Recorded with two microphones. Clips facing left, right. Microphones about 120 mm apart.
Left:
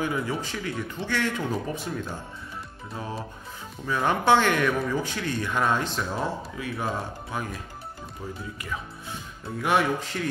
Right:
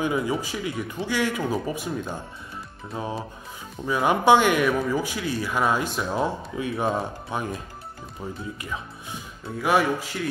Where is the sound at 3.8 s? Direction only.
15° right (ahead or behind).